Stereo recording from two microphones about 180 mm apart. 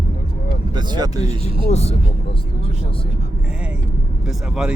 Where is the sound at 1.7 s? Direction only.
35° left (ahead or behind).